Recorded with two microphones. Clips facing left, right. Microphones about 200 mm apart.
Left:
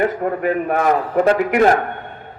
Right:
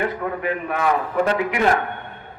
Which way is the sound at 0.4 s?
45° left (ahead or behind).